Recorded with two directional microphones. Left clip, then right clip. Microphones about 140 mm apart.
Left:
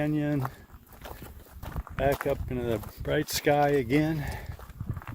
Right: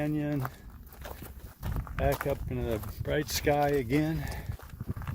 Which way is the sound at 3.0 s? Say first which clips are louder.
Left 2 dB; 45° left (ahead or behind).